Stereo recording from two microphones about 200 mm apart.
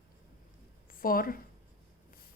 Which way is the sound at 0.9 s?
45° left (ahead or behind).